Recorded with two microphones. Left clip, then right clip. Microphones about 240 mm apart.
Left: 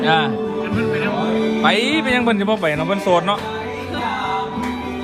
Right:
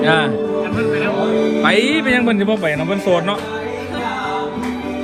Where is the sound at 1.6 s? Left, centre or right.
Left.